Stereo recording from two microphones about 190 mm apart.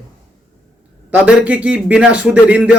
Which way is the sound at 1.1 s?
5° right (ahead or behind).